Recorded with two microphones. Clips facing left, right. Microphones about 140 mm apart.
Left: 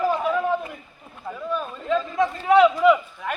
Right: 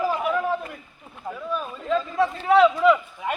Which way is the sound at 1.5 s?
5° right (ahead or behind).